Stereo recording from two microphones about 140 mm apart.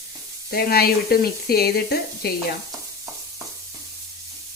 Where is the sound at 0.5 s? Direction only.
90° left.